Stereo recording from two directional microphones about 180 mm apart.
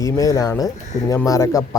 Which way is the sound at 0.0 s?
20° left (ahead or behind).